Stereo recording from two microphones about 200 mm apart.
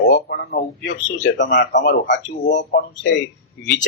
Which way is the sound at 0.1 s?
55° left (ahead or behind).